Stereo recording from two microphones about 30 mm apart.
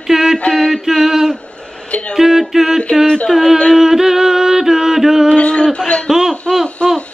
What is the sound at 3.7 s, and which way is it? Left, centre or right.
Music, centre.